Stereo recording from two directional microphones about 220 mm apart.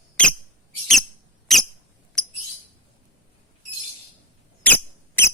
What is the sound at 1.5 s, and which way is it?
Squeak, centre (ahead or behind).